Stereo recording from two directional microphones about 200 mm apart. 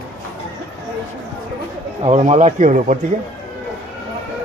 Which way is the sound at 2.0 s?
35° right (ahead or behind).